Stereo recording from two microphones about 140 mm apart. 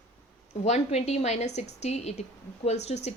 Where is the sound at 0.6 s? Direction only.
50° left (ahead or behind).